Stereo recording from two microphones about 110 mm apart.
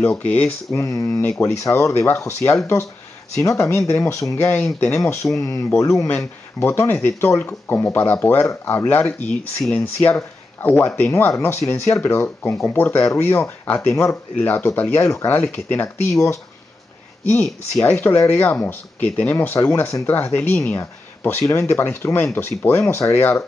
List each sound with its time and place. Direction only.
0.0 s speech: 10° left (ahead or behind)
0.7 s speech: 25° left (ahead or behind)
4.4 s speech: 10° left (ahead or behind)
4.9 s speech: 25° left (ahead or behind)
17.3 s speech: 15° left (ahead or behind)